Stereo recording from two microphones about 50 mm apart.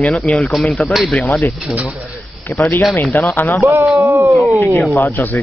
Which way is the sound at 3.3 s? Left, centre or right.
Left.